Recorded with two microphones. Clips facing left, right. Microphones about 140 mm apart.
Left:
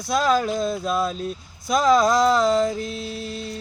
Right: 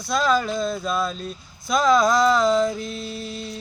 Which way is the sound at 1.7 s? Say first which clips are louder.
Left 1 dB; 40° left (ahead or behind).